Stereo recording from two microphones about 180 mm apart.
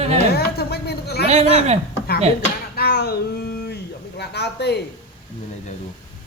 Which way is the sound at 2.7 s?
60° left (ahead or behind).